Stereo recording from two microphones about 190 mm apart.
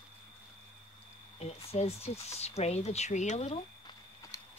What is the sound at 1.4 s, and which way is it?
Speech, 35° left (ahead or behind).